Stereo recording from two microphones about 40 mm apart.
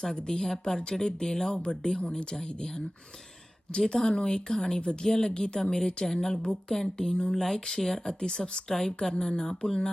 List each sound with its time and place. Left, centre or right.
0.0 s speech: centre
3.8 s speech: centre